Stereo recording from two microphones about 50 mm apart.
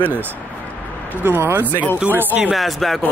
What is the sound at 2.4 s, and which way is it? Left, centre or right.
Speech, centre.